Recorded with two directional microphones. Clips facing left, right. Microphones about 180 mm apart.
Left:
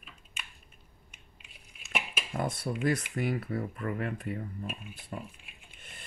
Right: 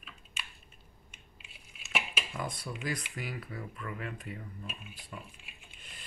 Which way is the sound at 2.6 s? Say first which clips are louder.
Left 8 dB; 50° left (ahead or behind).